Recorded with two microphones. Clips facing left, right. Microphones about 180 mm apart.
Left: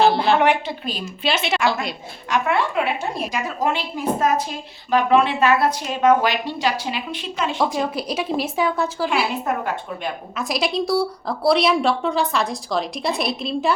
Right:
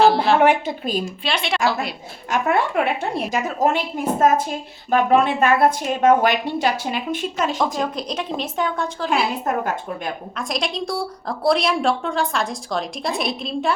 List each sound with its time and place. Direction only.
0.0 s a sound: centre (ahead or behind)
0.4 s a woman's voice: 45° right (ahead or behind)
1.0 s a woman's voice: centre (ahead or behind)
2.3 s a woman's voice: 45° right (ahead or behind)
7.8 s a woman's voice: 5° left (ahead or behind)
10.3 s a woman's voice: 5° left (ahead or behind)